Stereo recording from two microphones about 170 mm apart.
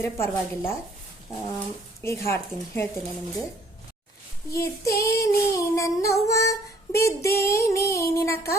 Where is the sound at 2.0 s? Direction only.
15° left (ahead or behind).